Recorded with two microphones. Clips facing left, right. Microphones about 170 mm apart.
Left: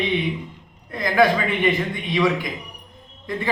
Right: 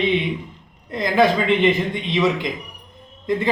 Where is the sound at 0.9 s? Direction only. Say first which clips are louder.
Right 1 dB; 25° right (ahead or behind).